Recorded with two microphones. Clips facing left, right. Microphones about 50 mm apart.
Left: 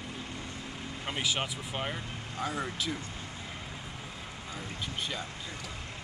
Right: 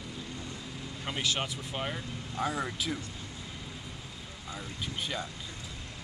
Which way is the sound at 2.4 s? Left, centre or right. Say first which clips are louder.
Right 1 dB; centre.